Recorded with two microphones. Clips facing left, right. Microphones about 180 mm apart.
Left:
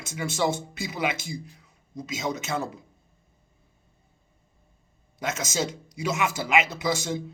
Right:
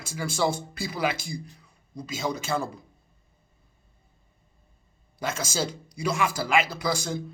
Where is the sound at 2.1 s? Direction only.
30° right (ahead or behind).